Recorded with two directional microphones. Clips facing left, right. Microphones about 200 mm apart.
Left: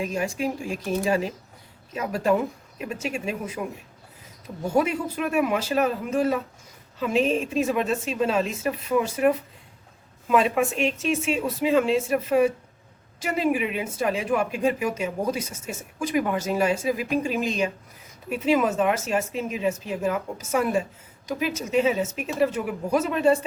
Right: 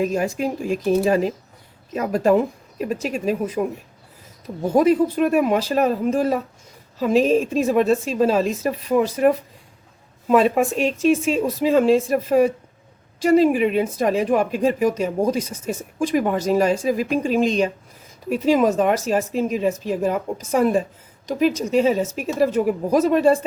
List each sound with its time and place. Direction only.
0.0 s a woman's voice: 40° right (ahead or behind)
1.9 s a woman's voice: 40° right (ahead or behind)
4.8 s a woman's voice: 40° right (ahead or behind)
7.5 s a woman's voice: 40° right (ahead or behind)